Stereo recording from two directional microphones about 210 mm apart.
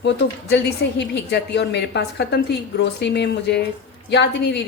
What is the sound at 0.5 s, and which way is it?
A woman's voice, 55° left (ahead or behind).